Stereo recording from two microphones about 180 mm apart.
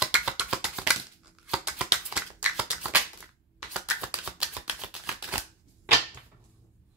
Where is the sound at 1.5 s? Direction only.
5° right (ahead or behind).